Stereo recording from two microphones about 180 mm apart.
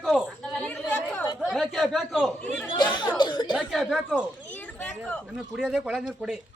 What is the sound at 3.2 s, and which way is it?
Cough, 25° left (ahead or behind).